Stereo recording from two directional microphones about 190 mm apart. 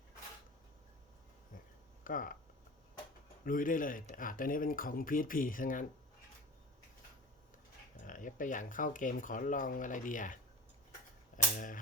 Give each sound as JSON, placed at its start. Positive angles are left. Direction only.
{"t": 2.0, "sound": "speech", "side_deg": 45}
{"t": 3.4, "sound": "speech", "side_deg": 45}
{"t": 8.0, "sound": "speech", "side_deg": 45}
{"t": 11.5, "sound": "speech", "side_deg": 45}